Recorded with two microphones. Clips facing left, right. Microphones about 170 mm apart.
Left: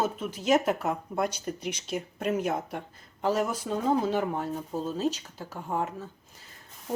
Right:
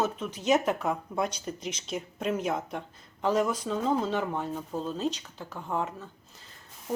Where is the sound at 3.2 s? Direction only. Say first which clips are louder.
Right 1 dB; 5° left (ahead or behind).